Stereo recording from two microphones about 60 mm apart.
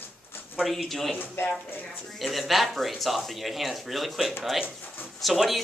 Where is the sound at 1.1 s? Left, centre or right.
Left.